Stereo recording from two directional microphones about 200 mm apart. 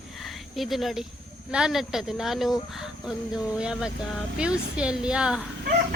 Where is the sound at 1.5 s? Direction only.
5° right (ahead or behind).